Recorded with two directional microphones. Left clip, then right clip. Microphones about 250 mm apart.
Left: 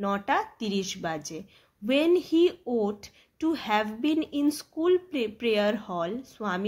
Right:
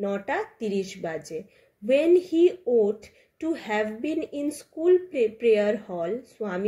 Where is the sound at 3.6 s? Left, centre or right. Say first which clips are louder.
Even; left.